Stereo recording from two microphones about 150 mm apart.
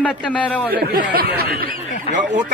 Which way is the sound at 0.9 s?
80° right.